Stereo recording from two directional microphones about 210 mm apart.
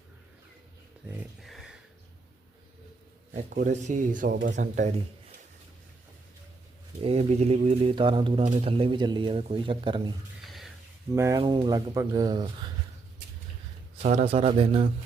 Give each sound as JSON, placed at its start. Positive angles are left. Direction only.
{"t": 1.0, "sound": "a sound", "side_deg": -5}
{"t": 3.5, "sound": "speech", "side_deg": -35}
{"t": 7.0, "sound": "speech", "side_deg": -30}
{"t": 10.4, "sound": "a sound", "side_deg": 0}
{"t": 11.1, "sound": "speech", "side_deg": -15}
{"t": 14.0, "sound": "speech", "side_deg": -30}